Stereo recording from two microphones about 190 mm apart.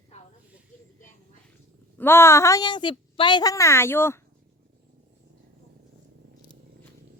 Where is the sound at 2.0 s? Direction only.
10° left (ahead or behind).